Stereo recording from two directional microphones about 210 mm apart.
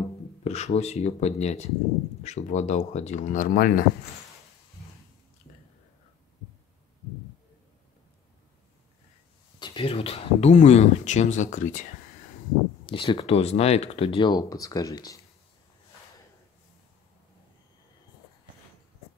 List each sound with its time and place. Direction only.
0.4 s speech: 30° left (ahead or behind)
9.6 s speech: 25° left (ahead or behind)
12.8 s speech: 25° left (ahead or behind)